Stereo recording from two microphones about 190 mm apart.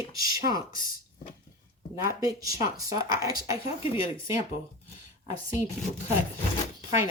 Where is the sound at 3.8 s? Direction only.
30° left (ahead or behind).